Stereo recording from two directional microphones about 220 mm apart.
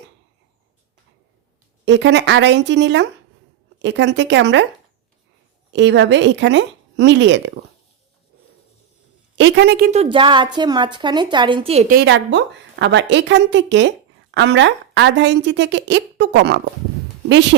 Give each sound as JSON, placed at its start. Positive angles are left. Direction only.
{"t": 1.8, "sound": "a woman's voice", "side_deg": -55}
{"t": 5.7, "sound": "speech", "side_deg": -55}
{"t": 9.4, "sound": "a woman's voice", "side_deg": -50}
{"t": 11.9, "sound": "a woman's voice", "side_deg": -50}